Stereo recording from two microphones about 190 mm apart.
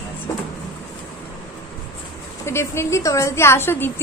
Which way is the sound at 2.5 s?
15° left (ahead or behind).